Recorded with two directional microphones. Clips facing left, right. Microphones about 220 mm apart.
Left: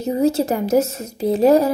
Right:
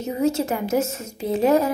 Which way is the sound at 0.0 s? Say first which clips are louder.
Left 4 dB; 35° left (ahead or behind).